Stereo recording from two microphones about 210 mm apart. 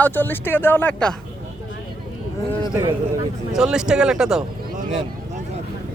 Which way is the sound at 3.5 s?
5° right (ahead or behind).